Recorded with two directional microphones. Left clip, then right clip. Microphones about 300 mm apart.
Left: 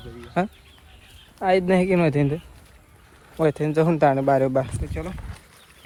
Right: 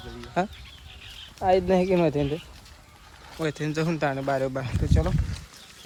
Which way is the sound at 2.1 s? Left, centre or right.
Left.